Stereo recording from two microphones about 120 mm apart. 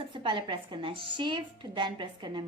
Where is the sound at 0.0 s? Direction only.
45° right (ahead or behind).